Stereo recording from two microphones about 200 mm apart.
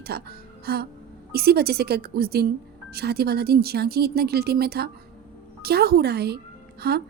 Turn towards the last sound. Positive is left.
turn(degrees=-55)  # may be behind; listen again after turning